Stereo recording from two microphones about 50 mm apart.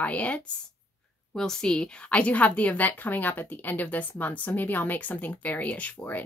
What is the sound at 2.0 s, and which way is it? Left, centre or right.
Speech, left.